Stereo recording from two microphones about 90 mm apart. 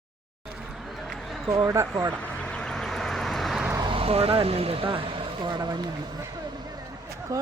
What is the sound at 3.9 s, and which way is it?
Speech, 90° right.